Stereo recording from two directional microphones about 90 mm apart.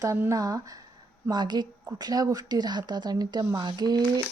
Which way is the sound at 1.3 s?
50° right (ahead or behind).